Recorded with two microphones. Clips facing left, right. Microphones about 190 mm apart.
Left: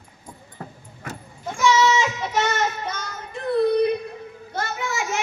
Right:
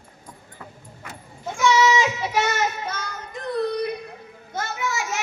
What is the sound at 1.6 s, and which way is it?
Child singing, 10° right (ahead or behind).